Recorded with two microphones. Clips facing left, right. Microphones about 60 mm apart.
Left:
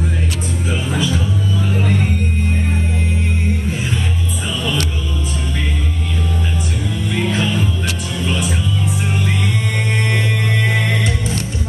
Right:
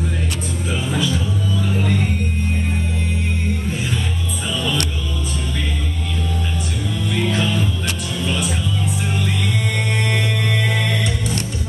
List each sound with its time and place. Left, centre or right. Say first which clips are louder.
7.1 s music: left 1 dB; centre
9.8 s music: left 2 dB; left